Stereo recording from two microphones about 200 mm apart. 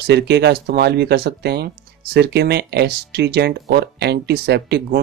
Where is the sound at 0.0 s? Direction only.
55° right (ahead or behind).